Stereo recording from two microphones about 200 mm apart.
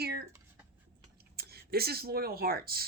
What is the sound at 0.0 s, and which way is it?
Writing, 55° right (ahead or behind).